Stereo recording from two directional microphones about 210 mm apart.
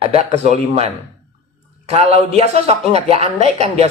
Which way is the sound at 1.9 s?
30° right (ahead or behind).